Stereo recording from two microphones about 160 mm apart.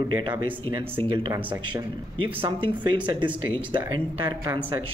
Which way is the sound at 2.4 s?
30° right (ahead or behind).